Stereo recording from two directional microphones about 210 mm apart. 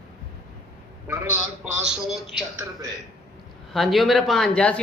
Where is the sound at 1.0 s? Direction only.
10° right (ahead or behind).